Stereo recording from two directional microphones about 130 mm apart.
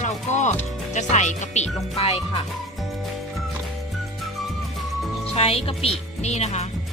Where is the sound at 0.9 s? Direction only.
65° left (ahead or behind).